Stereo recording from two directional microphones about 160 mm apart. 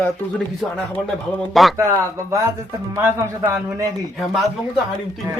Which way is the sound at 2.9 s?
10° right (ahead or behind).